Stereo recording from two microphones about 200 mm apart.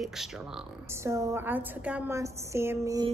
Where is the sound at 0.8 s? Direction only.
15° right (ahead or behind).